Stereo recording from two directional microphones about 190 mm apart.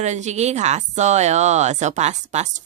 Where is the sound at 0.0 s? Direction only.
35° right (ahead or behind).